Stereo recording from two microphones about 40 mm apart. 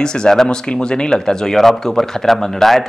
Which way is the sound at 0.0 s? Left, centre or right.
Centre.